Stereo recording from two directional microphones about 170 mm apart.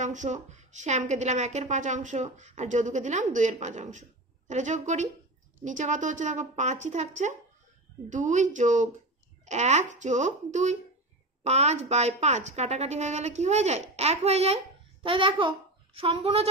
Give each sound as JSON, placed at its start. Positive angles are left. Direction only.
{"t": 0.0, "sound": "a woman's voice", "side_deg": -45}